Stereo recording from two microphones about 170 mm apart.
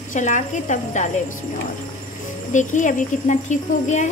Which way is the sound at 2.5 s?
50° left (ahead or behind).